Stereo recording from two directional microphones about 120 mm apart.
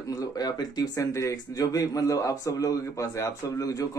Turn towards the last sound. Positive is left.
turn(degrees=30)  # may be behind; listen again after turning